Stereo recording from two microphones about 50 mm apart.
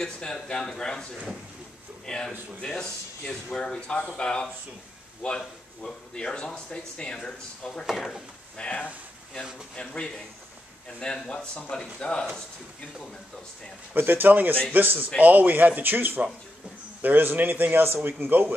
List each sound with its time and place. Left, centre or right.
0.0 s speech: centre
7.9 s speech: centre
8.5 s speech: left
11.2 s speech: centre
13.9 s a man's voice: right